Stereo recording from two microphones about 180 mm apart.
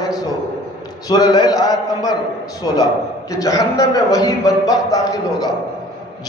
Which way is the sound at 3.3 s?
20° left (ahead or behind).